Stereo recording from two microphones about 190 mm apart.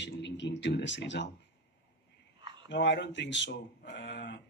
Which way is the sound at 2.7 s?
70° left (ahead or behind).